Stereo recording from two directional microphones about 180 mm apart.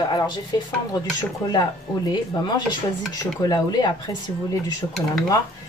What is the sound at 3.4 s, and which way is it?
Dishes, 25° left (ahead or behind).